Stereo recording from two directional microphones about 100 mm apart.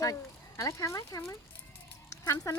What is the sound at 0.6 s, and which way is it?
Speech, 35° left (ahead or behind).